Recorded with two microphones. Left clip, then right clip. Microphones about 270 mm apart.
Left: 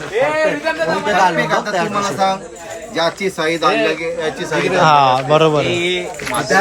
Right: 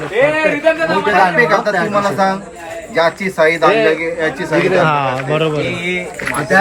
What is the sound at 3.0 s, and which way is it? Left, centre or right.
A man's voice, centre.